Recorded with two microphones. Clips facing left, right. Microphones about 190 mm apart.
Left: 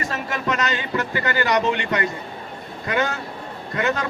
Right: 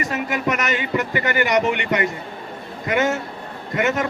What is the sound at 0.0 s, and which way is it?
Speech, 20° right (ahead or behind).